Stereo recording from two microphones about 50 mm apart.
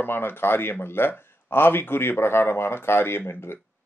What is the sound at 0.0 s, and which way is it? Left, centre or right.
Speech, left.